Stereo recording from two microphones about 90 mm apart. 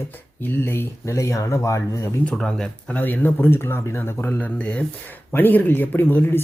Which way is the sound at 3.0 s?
20° left (ahead or behind).